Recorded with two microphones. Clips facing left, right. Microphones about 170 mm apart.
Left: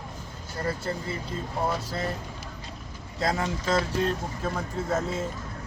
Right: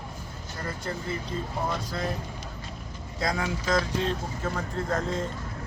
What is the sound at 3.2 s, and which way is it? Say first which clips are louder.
Speech: left 1 dB; 25° left (ahead or behind).